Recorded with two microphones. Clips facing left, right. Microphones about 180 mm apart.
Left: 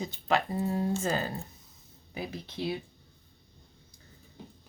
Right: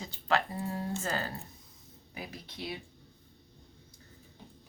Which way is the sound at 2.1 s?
30° left (ahead or behind).